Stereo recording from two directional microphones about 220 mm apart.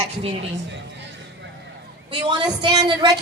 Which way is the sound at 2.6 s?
20° right (ahead or behind).